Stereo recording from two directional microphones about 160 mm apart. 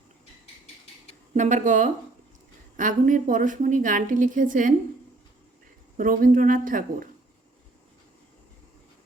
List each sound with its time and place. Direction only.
1.3 s a woman's voice: 50° right (ahead or behind)
6.0 s a woman's voice: 60° right (ahead or behind)